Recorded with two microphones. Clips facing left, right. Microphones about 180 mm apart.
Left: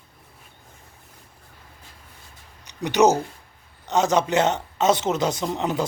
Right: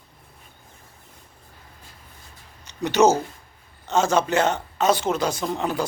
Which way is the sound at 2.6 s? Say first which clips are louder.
Even; 15° left (ahead or behind).